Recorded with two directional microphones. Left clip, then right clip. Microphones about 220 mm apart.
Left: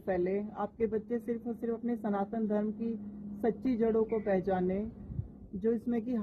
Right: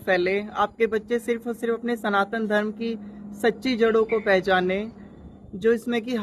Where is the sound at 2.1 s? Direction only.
5° right (ahead or behind).